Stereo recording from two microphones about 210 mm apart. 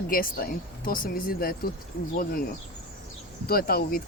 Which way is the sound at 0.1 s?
45° left (ahead or behind).